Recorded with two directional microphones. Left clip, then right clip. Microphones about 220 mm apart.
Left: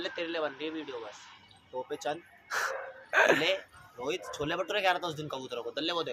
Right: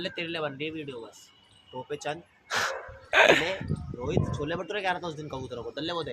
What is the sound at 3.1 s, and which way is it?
Speech, 20° right (ahead or behind).